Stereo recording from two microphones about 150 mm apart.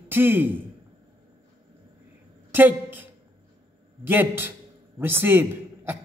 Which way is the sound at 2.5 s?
15° right (ahead or behind).